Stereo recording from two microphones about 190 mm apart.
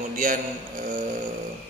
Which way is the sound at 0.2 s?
45° right (ahead or behind).